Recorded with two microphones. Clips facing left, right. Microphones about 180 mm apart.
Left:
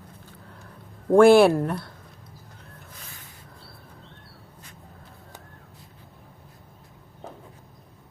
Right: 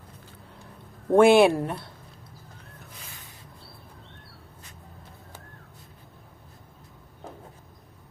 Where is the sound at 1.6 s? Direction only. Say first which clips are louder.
Left 3 dB; 5° right (ahead or behind).